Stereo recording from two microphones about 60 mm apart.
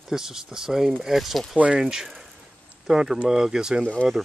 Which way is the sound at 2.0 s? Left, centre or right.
Centre.